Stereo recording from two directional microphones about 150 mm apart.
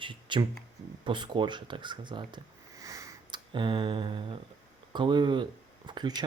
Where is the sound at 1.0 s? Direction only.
30° right (ahead or behind).